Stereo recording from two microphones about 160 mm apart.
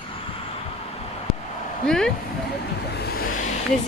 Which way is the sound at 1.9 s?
5° left (ahead or behind).